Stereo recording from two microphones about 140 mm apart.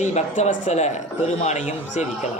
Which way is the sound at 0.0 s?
55° left (ahead or behind).